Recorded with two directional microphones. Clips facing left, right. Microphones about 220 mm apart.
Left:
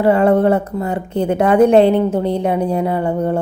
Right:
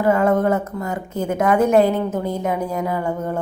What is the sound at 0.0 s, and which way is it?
A woman's voice, 30° left (ahead or behind).